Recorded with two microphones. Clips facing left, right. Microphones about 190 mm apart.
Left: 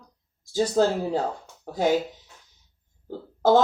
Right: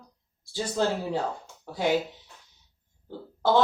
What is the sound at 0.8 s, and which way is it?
Speech, 40° left (ahead or behind).